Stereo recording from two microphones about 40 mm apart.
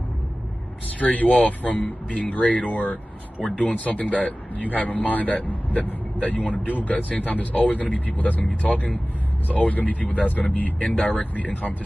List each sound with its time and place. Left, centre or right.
0.9 s speech: left